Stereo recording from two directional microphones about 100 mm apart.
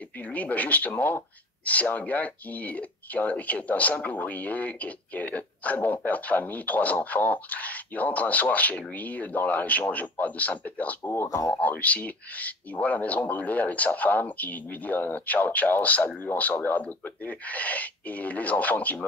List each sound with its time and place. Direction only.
0.3 s speech: 15° left (ahead or behind)
11.2 s speech: 35° left (ahead or behind)
11.6 s speech: 15° left (ahead or behind)